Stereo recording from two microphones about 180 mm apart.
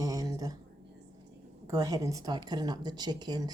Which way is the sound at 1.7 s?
20° right (ahead or behind).